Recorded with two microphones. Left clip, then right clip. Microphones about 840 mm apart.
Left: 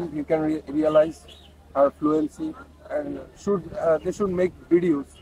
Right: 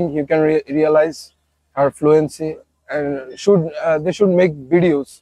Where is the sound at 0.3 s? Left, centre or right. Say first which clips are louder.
Right 8 dB; right.